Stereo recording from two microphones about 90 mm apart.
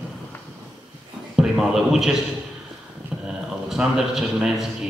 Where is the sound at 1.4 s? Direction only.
5° right (ahead or behind).